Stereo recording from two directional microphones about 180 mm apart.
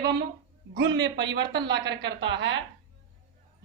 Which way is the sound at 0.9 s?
75° right (ahead or behind).